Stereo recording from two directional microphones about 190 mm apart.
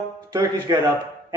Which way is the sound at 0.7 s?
20° right (ahead or behind).